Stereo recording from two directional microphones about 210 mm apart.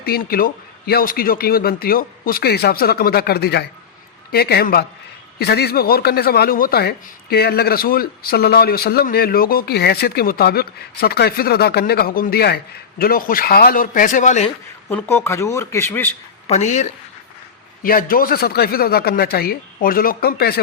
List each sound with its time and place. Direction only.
0.0 s a man's voice: 45° left (ahead or behind)
14.8 s speech: 10° left (ahead or behind)
16.5 s a man's voice: 35° left (ahead or behind)
17.8 s speech: 45° left (ahead or behind)